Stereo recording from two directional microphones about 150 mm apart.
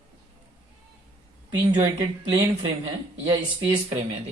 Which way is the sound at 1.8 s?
25° right (ahead or behind).